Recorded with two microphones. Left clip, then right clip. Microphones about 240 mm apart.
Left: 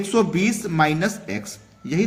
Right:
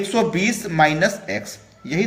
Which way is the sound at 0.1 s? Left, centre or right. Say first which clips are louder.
Left 1 dB; left.